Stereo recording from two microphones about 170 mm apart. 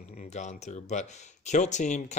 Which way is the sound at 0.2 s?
45° left (ahead or behind).